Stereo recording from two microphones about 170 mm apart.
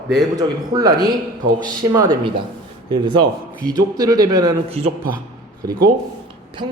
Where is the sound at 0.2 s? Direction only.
20° right (ahead or behind).